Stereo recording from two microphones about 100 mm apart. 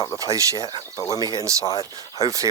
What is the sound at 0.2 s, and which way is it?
Speech, 35° right (ahead or behind).